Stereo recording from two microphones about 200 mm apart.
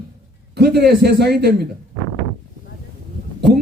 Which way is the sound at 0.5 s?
55° right (ahead or behind).